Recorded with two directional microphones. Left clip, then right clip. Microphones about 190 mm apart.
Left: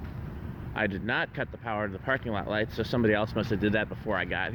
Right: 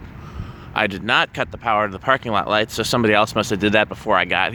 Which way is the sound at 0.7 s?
35° right (ahead or behind).